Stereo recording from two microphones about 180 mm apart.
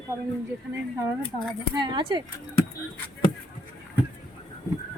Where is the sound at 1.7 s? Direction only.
25° right (ahead or behind).